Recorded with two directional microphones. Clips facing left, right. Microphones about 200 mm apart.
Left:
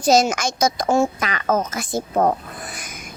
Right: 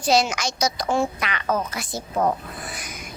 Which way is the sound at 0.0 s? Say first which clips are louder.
Left 4 dB; 45° left (ahead or behind).